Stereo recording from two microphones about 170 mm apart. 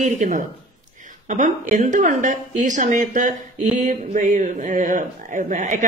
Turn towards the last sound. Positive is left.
turn(degrees=-45)  # may be behind; listen again after turning